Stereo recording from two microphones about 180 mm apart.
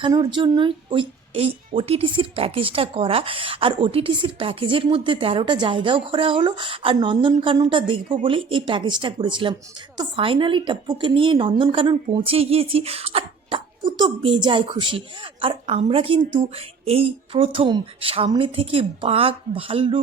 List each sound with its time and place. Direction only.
0.0 s a woman's voice: 25° right (ahead or behind)